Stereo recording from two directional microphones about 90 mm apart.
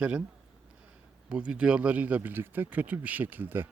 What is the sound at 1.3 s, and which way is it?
Speech, 10° right (ahead or behind).